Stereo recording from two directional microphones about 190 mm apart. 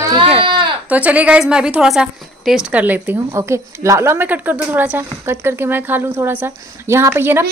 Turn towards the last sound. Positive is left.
turn(degrees=-10)  # may be behind; listen again after turning